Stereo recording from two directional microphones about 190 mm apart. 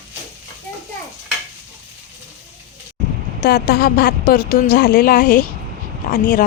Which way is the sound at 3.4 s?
55° left (ahead or behind).